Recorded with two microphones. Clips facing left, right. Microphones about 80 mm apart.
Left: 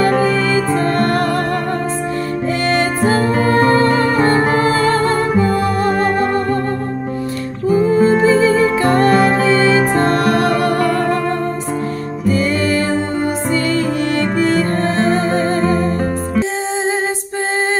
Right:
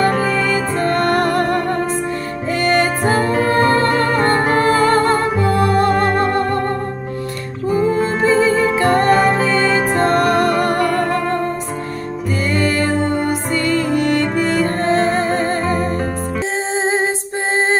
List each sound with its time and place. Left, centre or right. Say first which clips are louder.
0.1 s music: left 3 dB; centre
1.2 s music: right 1 dB; right
3.2 s music: even; centre
5.9 s music: even; centre
7.6 s music: left 4 dB; centre
12.3 s music: left 3 dB; right